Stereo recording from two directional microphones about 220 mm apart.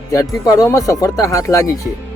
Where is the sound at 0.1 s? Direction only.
15° left (ahead or behind).